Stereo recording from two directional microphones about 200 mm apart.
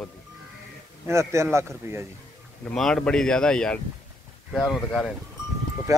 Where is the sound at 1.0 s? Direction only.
15° right (ahead or behind).